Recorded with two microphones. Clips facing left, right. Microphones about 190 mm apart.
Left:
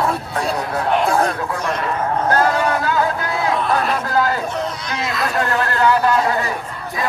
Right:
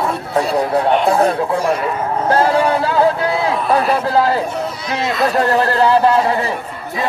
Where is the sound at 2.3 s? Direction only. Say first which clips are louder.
Right 4 dB; 30° right (ahead or behind).